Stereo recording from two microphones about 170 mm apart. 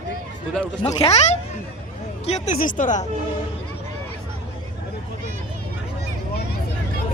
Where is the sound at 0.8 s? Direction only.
35° left (ahead or behind).